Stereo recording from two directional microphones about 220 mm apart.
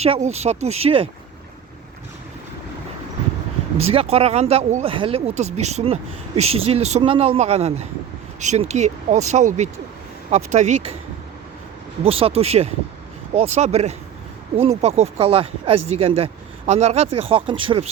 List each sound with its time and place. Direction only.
0.0 s speech: 30° right (ahead or behind)
3.8 s speech: 30° right (ahead or behind)
12.0 s speech: 25° right (ahead or behind)